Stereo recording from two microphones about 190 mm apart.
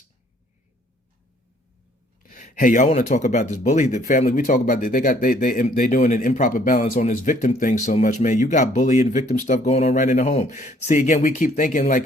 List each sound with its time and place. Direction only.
2.2 s speech: 45° left (ahead or behind)